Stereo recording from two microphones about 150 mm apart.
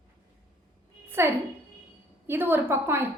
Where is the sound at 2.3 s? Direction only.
15° right (ahead or behind).